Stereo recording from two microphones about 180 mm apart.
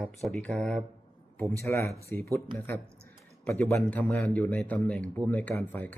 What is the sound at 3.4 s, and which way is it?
A man's voice, 10° left (ahead or behind).